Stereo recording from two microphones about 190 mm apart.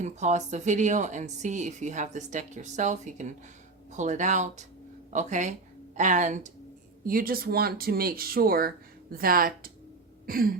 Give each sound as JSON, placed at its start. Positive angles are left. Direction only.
{"t": 0.0, "sound": "a woman's voice", "side_deg": -40}